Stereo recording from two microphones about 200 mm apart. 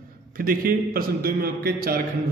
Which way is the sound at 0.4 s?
45° right (ahead or behind).